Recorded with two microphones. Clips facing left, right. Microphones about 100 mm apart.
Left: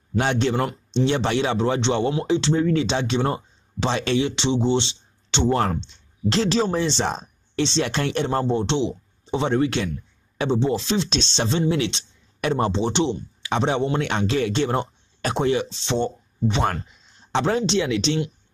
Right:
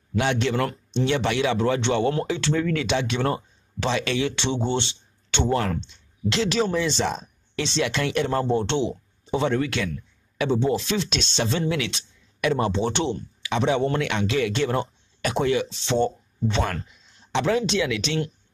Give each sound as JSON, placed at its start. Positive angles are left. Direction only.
{"t": 0.1, "sound": "speech", "side_deg": 35}
{"t": 12.8, "sound": "speech", "side_deg": 20}
{"t": 13.5, "sound": "speech", "side_deg": 30}
{"t": 17.3, "sound": "speech", "side_deg": 35}